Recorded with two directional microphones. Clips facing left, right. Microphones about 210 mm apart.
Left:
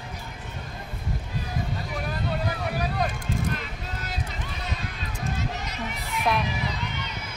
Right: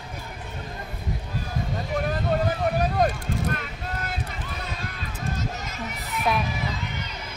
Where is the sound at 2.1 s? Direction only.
45° right (ahead or behind).